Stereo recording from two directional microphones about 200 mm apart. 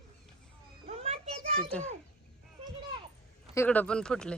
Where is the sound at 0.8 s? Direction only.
30° right (ahead or behind).